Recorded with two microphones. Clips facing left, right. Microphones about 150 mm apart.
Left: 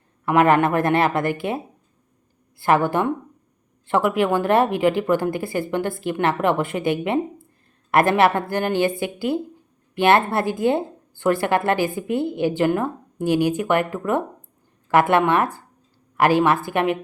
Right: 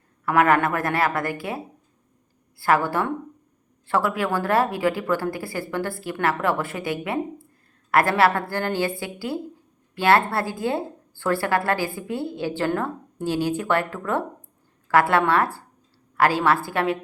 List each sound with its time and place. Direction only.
0.3 s a woman's voice: 20° left (ahead or behind)